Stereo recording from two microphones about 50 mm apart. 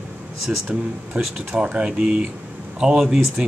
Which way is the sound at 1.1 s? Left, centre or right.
Right.